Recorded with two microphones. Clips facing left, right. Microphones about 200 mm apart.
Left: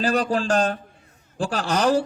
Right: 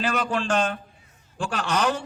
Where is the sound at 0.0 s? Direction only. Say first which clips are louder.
Left 4 dB; 35° left (ahead or behind).